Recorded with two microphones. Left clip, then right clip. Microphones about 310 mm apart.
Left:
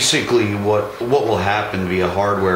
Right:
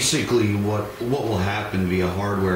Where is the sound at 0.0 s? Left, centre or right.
Centre.